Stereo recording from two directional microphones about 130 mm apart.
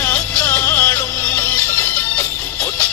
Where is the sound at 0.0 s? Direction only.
15° left (ahead or behind).